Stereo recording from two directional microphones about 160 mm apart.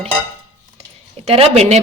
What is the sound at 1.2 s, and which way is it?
Speech, 40° right (ahead or behind).